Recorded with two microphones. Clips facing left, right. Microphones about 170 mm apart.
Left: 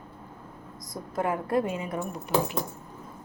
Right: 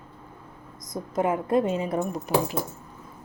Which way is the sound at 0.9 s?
20° right (ahead or behind).